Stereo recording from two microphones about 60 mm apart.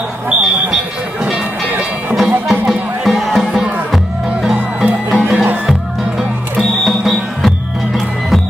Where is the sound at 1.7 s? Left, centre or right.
Right.